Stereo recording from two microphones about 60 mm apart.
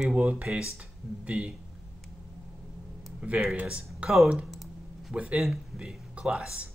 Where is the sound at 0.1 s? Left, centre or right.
Right.